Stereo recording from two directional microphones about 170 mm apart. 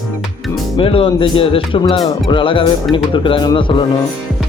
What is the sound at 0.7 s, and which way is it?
Speech, 30° left (ahead or behind).